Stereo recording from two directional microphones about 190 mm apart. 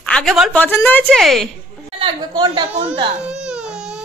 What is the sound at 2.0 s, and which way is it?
Speech, 25° right (ahead or behind).